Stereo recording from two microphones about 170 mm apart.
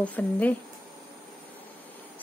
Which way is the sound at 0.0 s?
10° left (ahead or behind).